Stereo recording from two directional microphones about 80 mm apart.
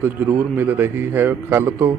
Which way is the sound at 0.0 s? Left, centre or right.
Right.